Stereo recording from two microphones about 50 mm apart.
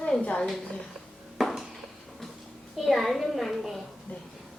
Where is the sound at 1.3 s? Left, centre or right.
Centre.